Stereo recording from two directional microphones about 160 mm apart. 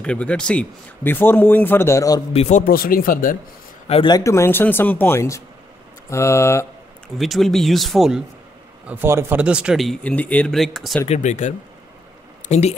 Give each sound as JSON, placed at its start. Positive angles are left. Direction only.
{"t": 0.0, "sound": "a man's voice", "side_deg": 5}
{"t": 2.3, "sound": "a man's voice", "side_deg": 40}
{"t": 2.6, "sound": "speech", "side_deg": 65}
{"t": 3.8, "sound": "speech", "side_deg": 40}
{"t": 4.1, "sound": "a man's voice", "side_deg": 20}
{"t": 7.2, "sound": "speech", "side_deg": 0}
{"t": 8.8, "sound": "speech", "side_deg": -15}
{"t": 11.1, "sound": "speech", "side_deg": 50}